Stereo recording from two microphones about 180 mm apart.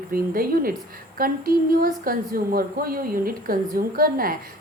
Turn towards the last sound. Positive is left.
turn(degrees=-55)  # may be behind; listen again after turning